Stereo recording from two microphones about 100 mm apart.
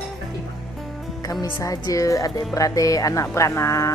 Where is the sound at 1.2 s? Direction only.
35° left (ahead or behind).